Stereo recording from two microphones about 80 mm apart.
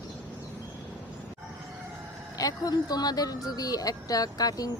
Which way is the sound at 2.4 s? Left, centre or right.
Left.